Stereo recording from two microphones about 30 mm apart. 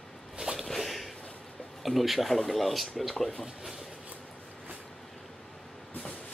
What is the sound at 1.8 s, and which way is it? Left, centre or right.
Speech, centre.